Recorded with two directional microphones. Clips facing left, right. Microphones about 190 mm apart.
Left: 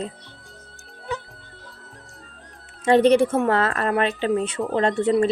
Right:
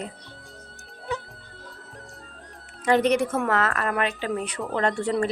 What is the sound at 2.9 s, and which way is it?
Speech, 30° left (ahead or behind).